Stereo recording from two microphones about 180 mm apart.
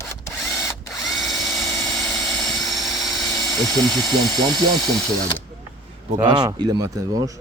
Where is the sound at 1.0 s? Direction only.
Centre (ahead or behind).